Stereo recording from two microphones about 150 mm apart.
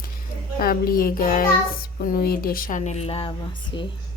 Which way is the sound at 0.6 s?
80° left.